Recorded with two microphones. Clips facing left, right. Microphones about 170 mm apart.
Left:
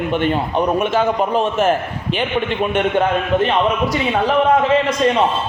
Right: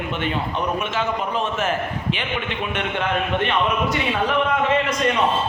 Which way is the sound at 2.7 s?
40° left (ahead or behind).